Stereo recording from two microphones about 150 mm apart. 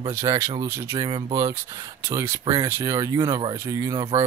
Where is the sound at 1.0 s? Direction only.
30° right (ahead or behind).